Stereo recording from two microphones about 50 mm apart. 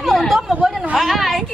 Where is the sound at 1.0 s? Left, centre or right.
Centre.